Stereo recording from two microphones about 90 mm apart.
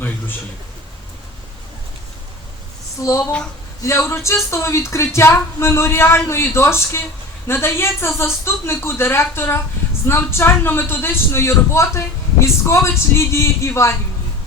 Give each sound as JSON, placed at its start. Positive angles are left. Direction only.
{"t": 3.0, "sound": "a man's voice", "side_deg": 35}